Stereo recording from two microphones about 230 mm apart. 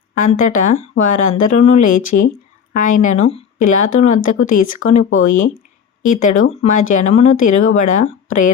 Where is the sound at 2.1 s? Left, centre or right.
Left.